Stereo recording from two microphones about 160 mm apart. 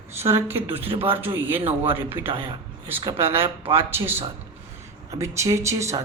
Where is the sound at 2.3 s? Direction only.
35° right (ahead or behind).